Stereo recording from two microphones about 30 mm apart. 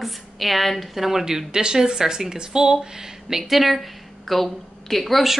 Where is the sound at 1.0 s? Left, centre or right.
Centre.